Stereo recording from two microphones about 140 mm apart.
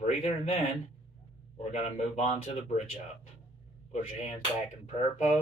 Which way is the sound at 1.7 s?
50° left (ahead or behind).